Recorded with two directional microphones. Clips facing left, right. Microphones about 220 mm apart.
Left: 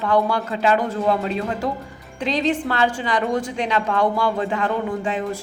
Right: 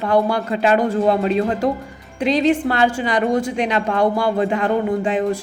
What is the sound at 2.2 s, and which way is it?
A woman's voice, 10° right (ahead or behind).